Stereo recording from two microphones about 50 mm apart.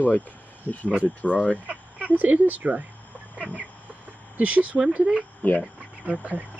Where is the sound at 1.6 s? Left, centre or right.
Right.